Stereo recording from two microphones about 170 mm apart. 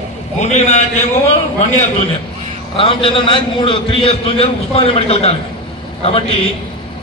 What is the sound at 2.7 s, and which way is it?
A man's voice, 30° left (ahead or behind).